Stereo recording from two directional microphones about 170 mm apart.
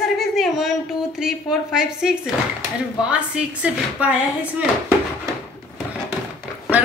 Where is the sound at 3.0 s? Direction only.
5° right (ahead or behind).